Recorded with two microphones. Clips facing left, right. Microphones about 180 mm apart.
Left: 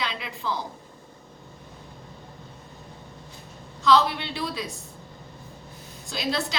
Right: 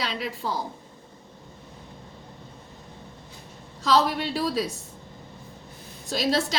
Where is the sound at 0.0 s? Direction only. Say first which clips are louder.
Right 2 dB; 40° right (ahead or behind).